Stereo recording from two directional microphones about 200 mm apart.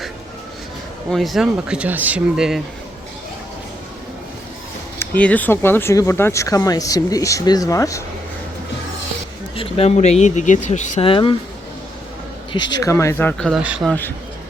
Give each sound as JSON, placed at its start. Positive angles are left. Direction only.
{"t": 1.1, "sound": "speech", "side_deg": 0}
{"t": 4.9, "sound": "speech", "side_deg": 10}
{"t": 9.6, "sound": "speech", "side_deg": 30}
{"t": 11.1, "sound": "speech", "side_deg": 25}
{"t": 12.5, "sound": "speech", "side_deg": 20}
{"t": 13.5, "sound": "speech", "side_deg": -5}